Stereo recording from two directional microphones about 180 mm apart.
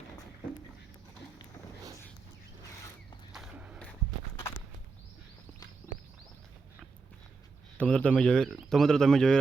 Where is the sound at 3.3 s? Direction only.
5° right (ahead or behind).